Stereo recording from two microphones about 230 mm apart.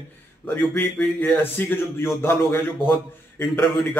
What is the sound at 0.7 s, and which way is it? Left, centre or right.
A man's voice, centre.